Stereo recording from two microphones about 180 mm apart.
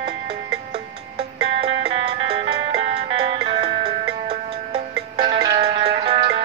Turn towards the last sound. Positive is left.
turn(degrees=-30)  # may be behind; listen again after turning